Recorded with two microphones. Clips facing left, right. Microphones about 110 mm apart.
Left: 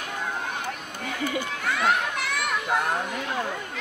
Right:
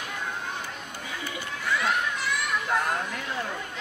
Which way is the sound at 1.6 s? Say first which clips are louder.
Left 1 dB; 55° left (ahead or behind).